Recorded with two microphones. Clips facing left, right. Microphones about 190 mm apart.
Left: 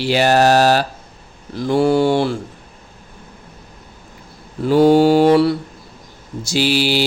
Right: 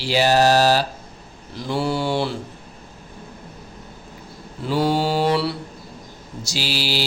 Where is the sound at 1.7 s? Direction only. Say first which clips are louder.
Left 8 dB; 50° left (ahead or behind).